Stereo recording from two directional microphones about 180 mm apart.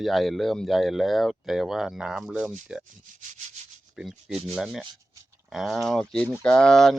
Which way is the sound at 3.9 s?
Centre (ahead or behind).